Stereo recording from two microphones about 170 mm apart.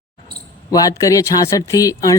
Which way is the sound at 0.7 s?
20° left (ahead or behind).